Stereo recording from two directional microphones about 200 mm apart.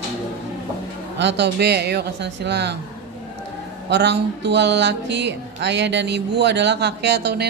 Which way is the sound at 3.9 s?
60° right (ahead or behind).